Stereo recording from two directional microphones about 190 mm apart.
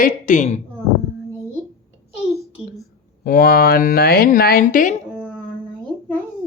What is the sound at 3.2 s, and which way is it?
Speech, 50° left (ahead or behind).